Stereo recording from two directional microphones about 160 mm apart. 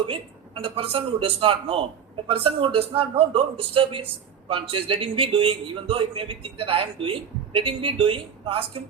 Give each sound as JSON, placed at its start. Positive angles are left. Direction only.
{"t": 0.1, "sound": "a man's voice", "side_deg": -35}